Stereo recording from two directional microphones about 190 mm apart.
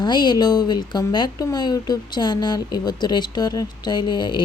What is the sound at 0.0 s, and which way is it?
Speech, 20° left (ahead or behind).